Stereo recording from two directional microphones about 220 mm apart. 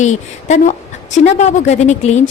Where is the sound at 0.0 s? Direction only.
35° left (ahead or behind).